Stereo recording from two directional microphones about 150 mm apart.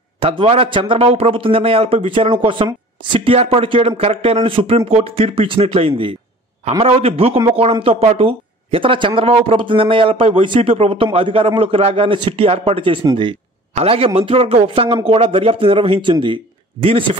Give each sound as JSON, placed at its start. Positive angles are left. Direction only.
{"t": 0.2, "sound": "speech", "side_deg": -35}